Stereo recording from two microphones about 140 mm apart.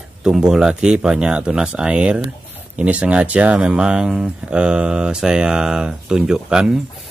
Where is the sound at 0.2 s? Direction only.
5° right (ahead or behind).